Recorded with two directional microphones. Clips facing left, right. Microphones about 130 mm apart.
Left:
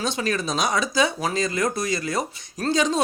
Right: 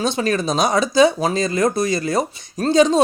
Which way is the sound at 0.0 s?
30° right (ahead or behind).